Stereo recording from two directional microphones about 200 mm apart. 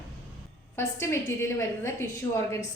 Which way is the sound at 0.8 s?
15° left (ahead or behind).